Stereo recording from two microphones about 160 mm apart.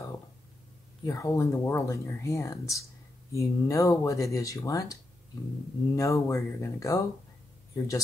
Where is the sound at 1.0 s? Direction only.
20° left (ahead or behind).